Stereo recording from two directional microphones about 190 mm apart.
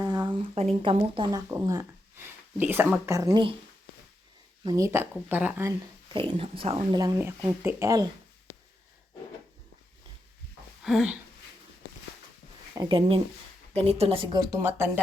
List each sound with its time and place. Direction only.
0.0 s a sound: 20° right (ahead or behind)
0.8 s speech: 25° right (ahead or behind)
4.6 s speech: 20° right (ahead or behind)
6.1 s speech: 30° right (ahead or behind)
8.5 s a sound: 90° left
10.8 s speech: 5° right (ahead or behind)
12.7 s speech: 30° right (ahead or behind); by 14.8 s 15° right (ahead or behind)